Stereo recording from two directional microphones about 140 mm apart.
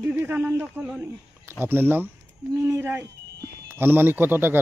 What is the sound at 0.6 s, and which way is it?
Speech, 5° right (ahead or behind).